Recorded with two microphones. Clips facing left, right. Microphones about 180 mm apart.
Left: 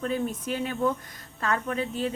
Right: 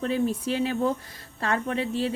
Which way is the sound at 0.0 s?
35° right (ahead or behind).